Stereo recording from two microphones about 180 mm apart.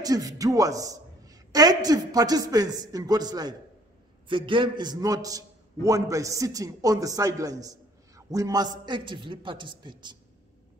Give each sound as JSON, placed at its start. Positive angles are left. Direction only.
{"t": 0.0, "sound": "a woman's voice", "side_deg": -20}